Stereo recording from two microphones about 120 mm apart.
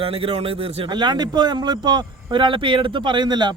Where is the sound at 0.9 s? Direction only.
40° right (ahead or behind).